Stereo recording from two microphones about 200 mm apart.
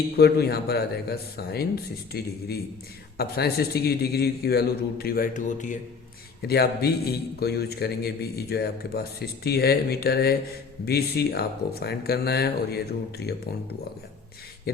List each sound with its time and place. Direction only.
0.2 s a man's voice: 55° left (ahead or behind)
6.5 s a man's voice: 55° left (ahead or behind)